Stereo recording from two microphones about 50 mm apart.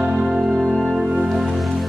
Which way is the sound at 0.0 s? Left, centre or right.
Centre.